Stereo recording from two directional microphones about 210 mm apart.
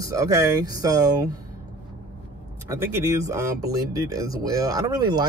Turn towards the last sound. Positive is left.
turn(degrees=-20)  # may be behind; listen again after turning